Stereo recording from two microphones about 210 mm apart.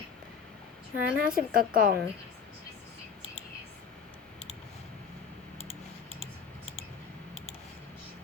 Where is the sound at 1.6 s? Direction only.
40° right (ahead or behind).